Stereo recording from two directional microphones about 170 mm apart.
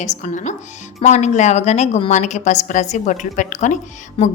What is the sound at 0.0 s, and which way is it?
A woman's voice, 45° left (ahead or behind).